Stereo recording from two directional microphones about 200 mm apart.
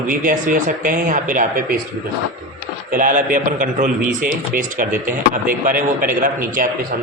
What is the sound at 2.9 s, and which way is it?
A man's voice, 40° right (ahead or behind).